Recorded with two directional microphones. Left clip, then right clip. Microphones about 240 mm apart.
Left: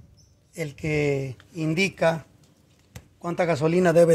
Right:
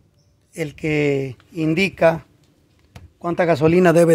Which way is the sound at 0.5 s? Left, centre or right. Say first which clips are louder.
Right 5 dB; right.